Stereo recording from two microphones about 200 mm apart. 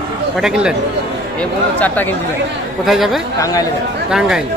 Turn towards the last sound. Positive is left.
turn(degrees=-5)  # may be behind; listen again after turning